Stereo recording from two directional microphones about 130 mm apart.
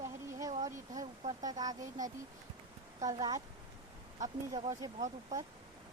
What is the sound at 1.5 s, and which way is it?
Speech, 30° right (ahead or behind).